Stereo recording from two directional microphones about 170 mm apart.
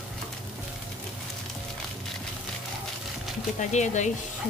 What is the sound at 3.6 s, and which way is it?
Speech, 45° left (ahead or behind).